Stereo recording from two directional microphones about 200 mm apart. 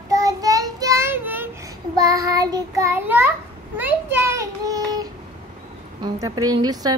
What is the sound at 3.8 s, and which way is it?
A child's voice, 10° right (ahead or behind).